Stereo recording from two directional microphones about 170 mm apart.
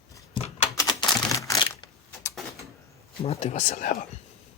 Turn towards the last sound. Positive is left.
turn(degrees=50)  # may be behind; listen again after turning